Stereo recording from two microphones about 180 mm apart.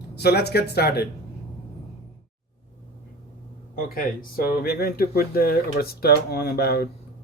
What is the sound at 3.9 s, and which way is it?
Speech, 55° left (ahead or behind).